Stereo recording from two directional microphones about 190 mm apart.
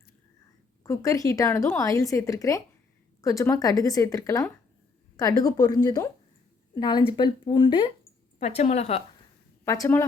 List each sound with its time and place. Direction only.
0.9 s speech: 15° left (ahead or behind)
8.4 s a woman's voice: 35° left (ahead or behind)
9.6 s speech: 15° left (ahead or behind)